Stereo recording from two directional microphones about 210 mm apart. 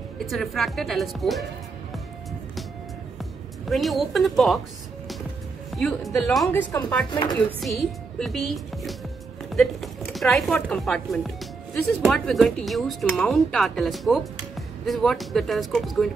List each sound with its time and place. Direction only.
0.3 s speech: centre (ahead or behind)
3.6 s speech: centre (ahead or behind)
5.7 s a woman's voice: centre (ahead or behind)
7.1 s chopping: 20° left (ahead or behind)
7.3 s speech: centre (ahead or behind)